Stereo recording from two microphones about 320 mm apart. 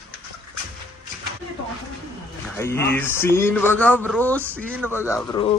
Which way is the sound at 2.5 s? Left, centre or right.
Centre.